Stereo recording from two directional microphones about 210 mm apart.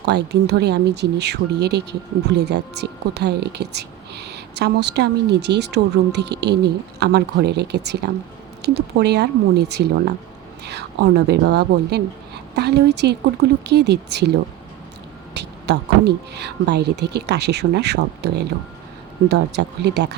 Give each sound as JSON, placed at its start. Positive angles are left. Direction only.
{"t": 0.0, "sound": "speech", "side_deg": -50}
{"t": 15.4, "sound": "speech", "side_deg": -50}